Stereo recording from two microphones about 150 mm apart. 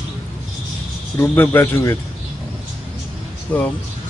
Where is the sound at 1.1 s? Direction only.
15° left (ahead or behind).